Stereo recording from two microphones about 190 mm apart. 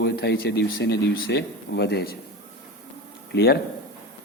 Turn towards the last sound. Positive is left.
turn(degrees=65)  # may be behind; listen again after turning